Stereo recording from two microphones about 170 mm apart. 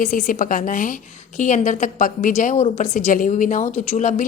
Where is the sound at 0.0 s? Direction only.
50° left (ahead or behind).